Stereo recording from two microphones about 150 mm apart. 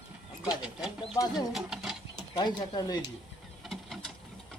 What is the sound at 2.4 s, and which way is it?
Speech, 30° left (ahead or behind).